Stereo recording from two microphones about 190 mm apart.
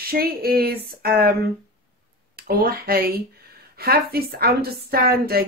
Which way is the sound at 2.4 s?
50° right (ahead or behind).